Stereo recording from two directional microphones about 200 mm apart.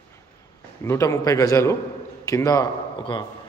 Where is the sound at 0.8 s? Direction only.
15° left (ahead or behind).